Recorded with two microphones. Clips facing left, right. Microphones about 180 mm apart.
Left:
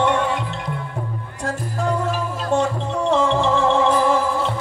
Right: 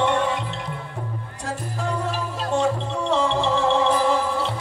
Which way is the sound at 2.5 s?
55° left (ahead or behind).